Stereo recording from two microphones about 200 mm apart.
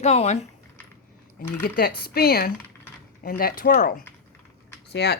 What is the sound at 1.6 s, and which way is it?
Speech, 45° left (ahead or behind).